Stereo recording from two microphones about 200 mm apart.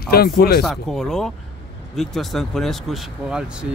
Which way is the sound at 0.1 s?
50° left (ahead or behind).